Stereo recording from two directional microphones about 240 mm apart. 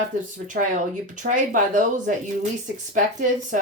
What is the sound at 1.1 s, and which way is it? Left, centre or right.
Speech, right.